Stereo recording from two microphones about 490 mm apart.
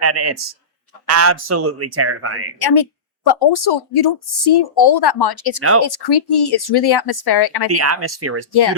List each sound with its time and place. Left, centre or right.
0.0 s speech: right
2.6 s speech: left
7.8 s speech: right